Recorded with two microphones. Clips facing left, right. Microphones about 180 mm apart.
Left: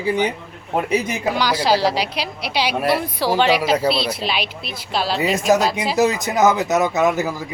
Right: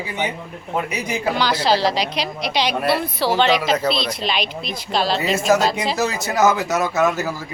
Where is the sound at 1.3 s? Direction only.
10° left (ahead or behind).